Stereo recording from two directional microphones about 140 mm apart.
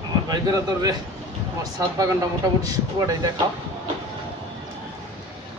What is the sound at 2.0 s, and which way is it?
A man's voice, 25° right (ahead or behind).